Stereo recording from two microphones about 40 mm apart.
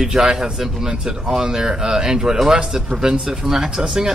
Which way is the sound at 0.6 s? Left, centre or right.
Centre.